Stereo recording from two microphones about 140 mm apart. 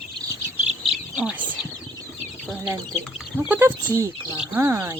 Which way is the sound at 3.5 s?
15° right (ahead or behind).